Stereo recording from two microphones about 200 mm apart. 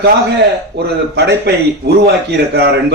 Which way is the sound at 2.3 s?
60° right (ahead or behind).